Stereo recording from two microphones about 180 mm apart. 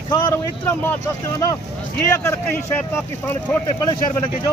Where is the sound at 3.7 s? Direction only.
25° left (ahead or behind).